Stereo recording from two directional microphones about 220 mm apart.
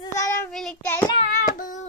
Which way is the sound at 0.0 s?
15° left (ahead or behind).